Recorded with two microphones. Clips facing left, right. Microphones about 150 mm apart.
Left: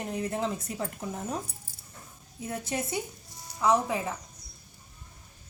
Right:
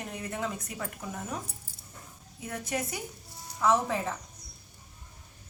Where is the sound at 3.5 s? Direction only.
15° left (ahead or behind).